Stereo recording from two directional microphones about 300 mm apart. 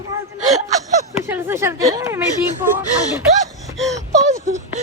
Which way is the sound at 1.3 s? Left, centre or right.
Centre.